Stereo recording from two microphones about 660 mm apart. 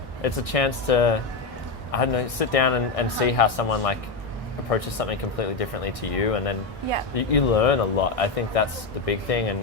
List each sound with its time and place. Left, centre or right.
0.2 s speech: left